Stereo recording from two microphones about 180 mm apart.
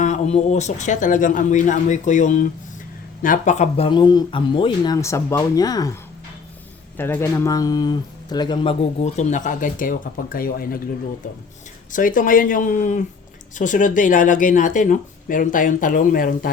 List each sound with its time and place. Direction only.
0.0 s speech: 40° left (ahead or behind)
4.9 s speech: 15° left (ahead or behind)
9.1 s speech: 45° left (ahead or behind)
11.9 s speech: 50° left (ahead or behind)